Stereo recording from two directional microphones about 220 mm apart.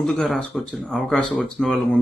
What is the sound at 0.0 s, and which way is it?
Speech, centre (ahead or behind).